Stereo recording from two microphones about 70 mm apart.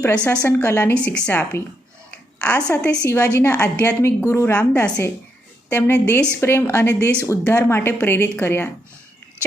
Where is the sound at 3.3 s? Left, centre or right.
Left.